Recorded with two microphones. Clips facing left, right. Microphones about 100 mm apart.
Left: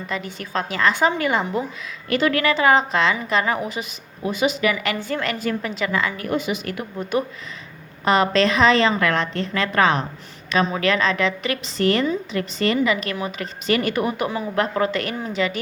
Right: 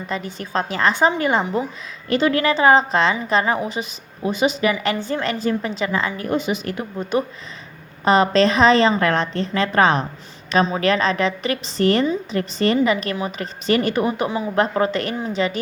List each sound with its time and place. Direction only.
0.1 s a woman's voice: 35° right (ahead or behind)